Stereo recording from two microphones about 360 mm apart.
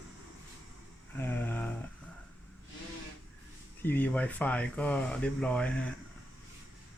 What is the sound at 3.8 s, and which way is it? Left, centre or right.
Speech, centre.